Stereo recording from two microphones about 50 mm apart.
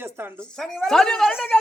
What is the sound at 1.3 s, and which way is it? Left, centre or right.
Speech, left.